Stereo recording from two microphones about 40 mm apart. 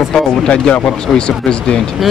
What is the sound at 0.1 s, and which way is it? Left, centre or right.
Speech, centre.